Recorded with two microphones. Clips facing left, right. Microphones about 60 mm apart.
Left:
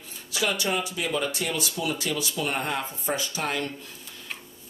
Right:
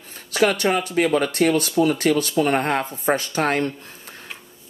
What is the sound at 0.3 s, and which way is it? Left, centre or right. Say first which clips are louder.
Speech: right 8 dB; right.